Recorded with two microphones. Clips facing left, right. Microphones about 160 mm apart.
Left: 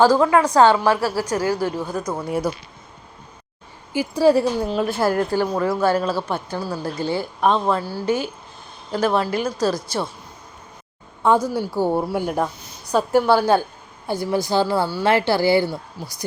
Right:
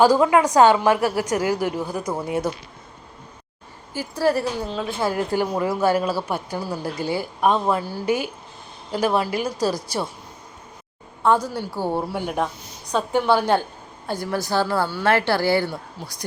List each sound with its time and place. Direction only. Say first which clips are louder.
0.0 s a woman's voice: left 1 dB; 15° right (ahead or behind)
3.9 s a woman's voice: left 5 dB; 15° left (ahead or behind)
5.3 s a woman's voice: left 2 dB; 15° right (ahead or behind)
11.4 s a woman's voice: left 5 dB; 10° left (ahead or behind)